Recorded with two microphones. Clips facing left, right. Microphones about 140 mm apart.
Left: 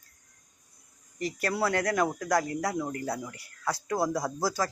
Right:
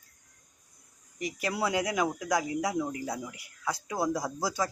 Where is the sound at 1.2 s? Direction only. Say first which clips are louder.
Left 2 dB; 5° right (ahead or behind).